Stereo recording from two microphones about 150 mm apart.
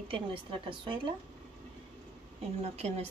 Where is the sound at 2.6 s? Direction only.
45° right (ahead or behind).